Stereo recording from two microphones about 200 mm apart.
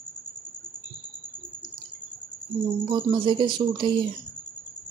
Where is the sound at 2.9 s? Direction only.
25° right (ahead or behind).